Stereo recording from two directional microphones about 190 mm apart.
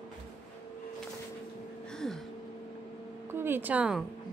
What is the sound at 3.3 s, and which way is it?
Speech, 10° right (ahead or behind).